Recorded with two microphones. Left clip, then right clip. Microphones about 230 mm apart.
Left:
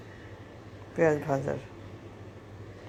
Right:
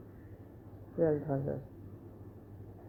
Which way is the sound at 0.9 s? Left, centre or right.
Left.